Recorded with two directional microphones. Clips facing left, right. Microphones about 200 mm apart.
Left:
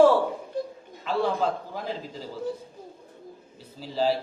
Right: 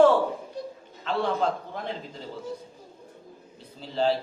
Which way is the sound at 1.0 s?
5° left (ahead or behind).